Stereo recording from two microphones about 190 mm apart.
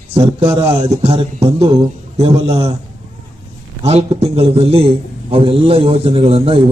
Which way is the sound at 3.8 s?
35° right (ahead or behind).